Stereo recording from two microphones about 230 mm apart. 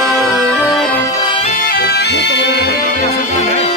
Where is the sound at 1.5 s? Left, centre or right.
Left.